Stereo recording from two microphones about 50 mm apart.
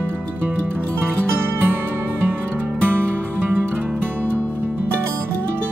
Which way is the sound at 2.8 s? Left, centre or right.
Right.